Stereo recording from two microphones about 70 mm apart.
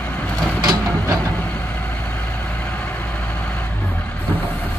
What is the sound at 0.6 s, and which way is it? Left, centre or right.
Vehicle, right.